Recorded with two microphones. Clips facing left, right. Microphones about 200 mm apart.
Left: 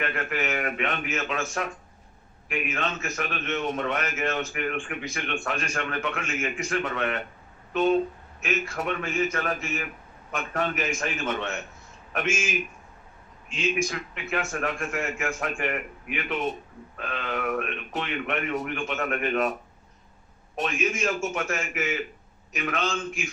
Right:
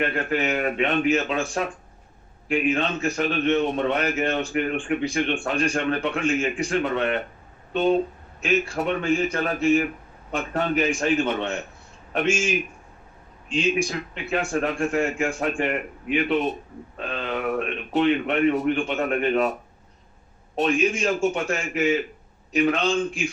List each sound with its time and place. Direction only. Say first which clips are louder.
0.0 s a man's voice: right 5 dB; 30° right (ahead or behind)
13.5 s a man's voice: right 4 dB; 30° right (ahead or behind)
20.6 s a man's voice: right 6 dB; 30° right (ahead or behind)